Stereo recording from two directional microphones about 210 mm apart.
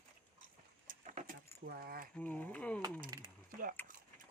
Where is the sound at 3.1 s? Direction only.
15° right (ahead or behind).